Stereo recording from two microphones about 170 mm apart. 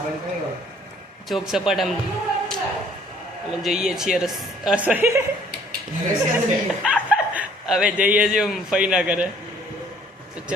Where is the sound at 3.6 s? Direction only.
Centre (ahead or behind).